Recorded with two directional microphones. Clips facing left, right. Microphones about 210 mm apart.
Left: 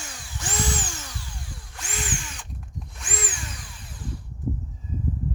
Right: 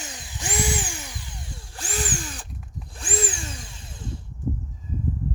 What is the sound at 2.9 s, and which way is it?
Drill, 30° right (ahead or behind).